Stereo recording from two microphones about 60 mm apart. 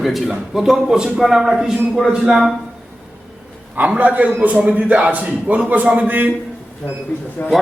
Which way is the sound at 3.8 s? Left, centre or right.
Right.